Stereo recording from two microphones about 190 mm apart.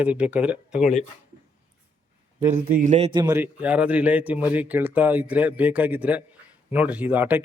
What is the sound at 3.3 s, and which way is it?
Speech, 10° right (ahead or behind).